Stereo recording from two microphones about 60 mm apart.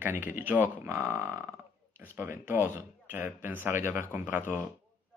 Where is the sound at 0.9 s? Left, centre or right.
Right.